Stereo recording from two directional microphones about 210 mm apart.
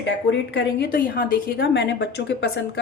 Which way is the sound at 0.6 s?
45° left (ahead or behind).